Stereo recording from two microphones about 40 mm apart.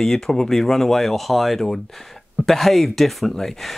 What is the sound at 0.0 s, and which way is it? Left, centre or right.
Speech, centre.